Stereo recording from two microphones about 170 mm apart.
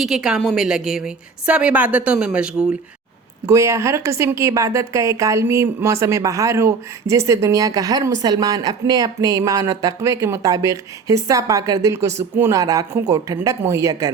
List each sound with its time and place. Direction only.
0.0 s a woman's voice: 5° right (ahead or behind)
3.4 s a woman's voice: 20° right (ahead or behind)